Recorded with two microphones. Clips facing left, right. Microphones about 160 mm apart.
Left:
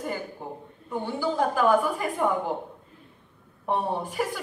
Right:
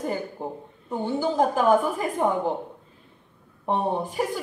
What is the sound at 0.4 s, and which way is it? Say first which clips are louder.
A man's voice: right 4 dB; 20° right (ahead or behind).